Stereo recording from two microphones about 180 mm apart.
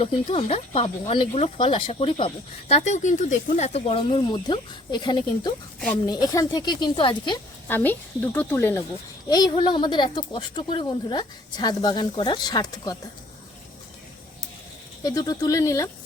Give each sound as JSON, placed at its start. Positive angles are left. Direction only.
{"t": 0.0, "sound": "speech", "side_deg": 30}
{"t": 7.7, "sound": "speech", "side_deg": 10}
{"t": 9.3, "sound": "speech", "side_deg": 20}
{"t": 15.0, "sound": "speech", "side_deg": 20}